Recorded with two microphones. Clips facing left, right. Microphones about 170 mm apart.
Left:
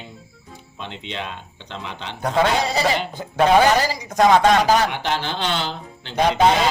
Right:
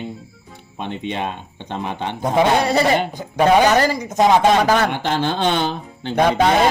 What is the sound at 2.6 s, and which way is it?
Speech, 60° right (ahead or behind).